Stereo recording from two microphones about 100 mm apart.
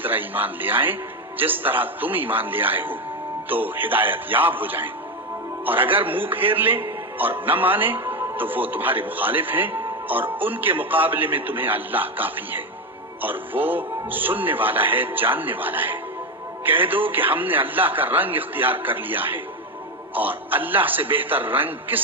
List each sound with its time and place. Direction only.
0.0 s a man's voice: 20° right (ahead or behind)